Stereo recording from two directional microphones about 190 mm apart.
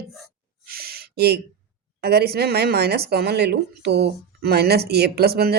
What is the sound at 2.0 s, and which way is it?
Speech, 55° right (ahead or behind).